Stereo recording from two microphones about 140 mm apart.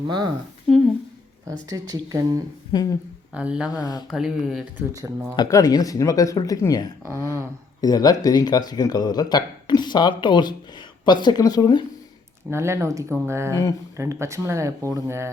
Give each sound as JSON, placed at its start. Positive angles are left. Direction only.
{"t": 0.7, "sound": "a sound", "side_deg": 5}
{"t": 1.5, "sound": "speech", "side_deg": -25}
{"t": 2.7, "sound": "speech", "side_deg": 25}
{"t": 3.3, "sound": "speech", "side_deg": -5}
{"t": 4.9, "sound": "speech", "side_deg": -20}
{"t": 5.4, "sound": "speech", "side_deg": 25}
{"t": 7.0, "sound": "speech", "side_deg": -20}
{"t": 7.8, "sound": "speech", "side_deg": 25}
{"t": 12.5, "sound": "speech", "side_deg": -20}